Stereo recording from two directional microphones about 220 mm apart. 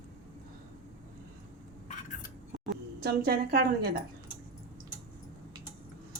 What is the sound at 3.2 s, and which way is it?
Speech, 45° right (ahead or behind).